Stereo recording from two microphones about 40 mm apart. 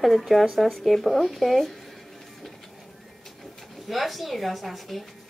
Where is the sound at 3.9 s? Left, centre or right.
Centre.